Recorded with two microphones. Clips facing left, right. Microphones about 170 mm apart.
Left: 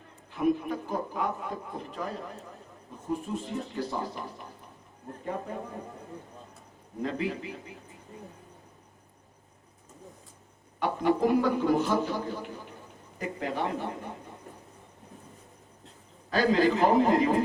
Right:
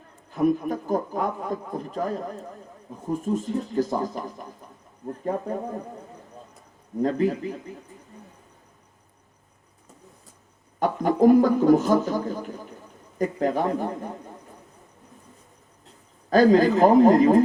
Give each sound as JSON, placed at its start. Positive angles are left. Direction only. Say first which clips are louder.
{"t": 0.3, "sound": "a man's voice", "louder": "right 5 dB", "side_deg": -40}
{"t": 7.0, "sound": "a man's voice", "louder": "right 8 dB", "side_deg": -45}
{"t": 10.8, "sound": "a man's voice", "louder": "right 5 dB", "side_deg": -45}
{"t": 16.3, "sound": "a man's voice", "louder": "right 7 dB", "side_deg": -45}